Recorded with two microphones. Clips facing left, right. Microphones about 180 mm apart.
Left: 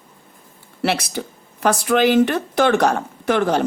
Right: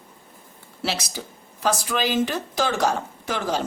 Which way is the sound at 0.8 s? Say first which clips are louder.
Left 7 dB; 60° left (ahead or behind).